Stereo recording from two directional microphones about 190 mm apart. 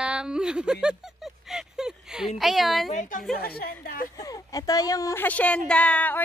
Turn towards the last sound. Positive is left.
turn(degrees=5)  # may be behind; listen again after turning